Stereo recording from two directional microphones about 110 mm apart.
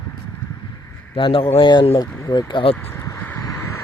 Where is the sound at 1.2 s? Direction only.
50° left (ahead or behind).